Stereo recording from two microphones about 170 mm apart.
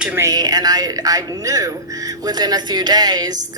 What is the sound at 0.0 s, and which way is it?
A woman's voice, 15° right (ahead or behind).